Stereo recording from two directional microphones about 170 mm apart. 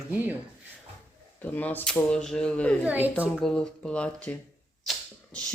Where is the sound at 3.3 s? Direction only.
5° left (ahead or behind).